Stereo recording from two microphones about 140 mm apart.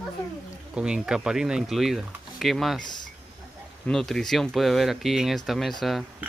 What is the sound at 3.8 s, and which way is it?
Speech, 5° left (ahead or behind).